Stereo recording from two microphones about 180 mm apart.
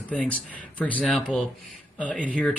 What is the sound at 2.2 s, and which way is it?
Speech, 5° left (ahead or behind).